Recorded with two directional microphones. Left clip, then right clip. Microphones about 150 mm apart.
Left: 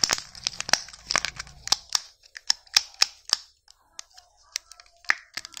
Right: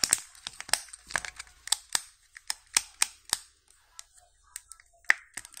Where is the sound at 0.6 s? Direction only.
30° left (ahead or behind).